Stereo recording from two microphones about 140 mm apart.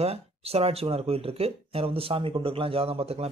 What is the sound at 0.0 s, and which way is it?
Speech, 45° right (ahead or behind).